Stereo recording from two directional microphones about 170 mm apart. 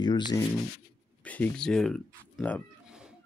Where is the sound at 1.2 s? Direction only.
10° left (ahead or behind).